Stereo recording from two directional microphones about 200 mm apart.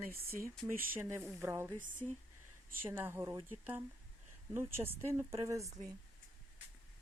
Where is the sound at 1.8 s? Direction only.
40° right (ahead or behind).